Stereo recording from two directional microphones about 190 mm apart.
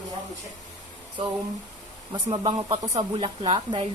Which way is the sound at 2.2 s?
30° right (ahead or behind).